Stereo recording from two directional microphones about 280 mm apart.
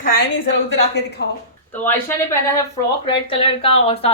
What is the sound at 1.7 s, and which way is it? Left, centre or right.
Speech, centre.